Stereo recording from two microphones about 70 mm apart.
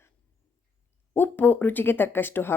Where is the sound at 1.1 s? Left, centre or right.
Left.